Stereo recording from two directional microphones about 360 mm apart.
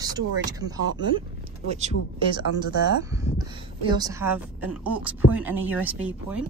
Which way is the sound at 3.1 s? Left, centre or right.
Centre.